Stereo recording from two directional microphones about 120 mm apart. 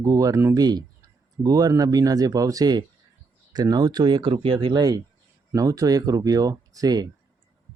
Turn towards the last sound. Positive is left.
turn(degrees=-30)  # may be behind; listen again after turning